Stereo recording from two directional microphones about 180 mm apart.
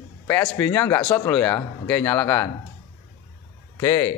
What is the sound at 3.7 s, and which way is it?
Speech, 15° left (ahead or behind).